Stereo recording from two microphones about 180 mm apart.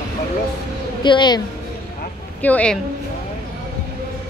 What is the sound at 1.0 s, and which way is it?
Speech, 25° left (ahead or behind).